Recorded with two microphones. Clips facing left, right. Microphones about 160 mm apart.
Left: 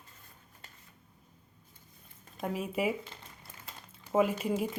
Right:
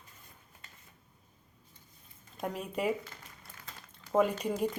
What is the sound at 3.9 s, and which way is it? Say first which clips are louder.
Speech: even; 5° left (ahead or behind).